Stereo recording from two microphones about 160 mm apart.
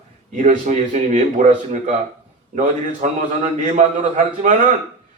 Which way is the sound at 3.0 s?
50° right (ahead or behind).